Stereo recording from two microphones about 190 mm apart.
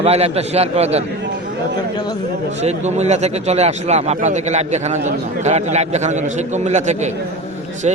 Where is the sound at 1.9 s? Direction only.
25° left (ahead or behind).